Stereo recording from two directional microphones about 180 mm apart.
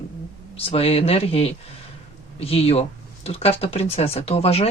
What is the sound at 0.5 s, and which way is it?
Speech, 35° left (ahead or behind).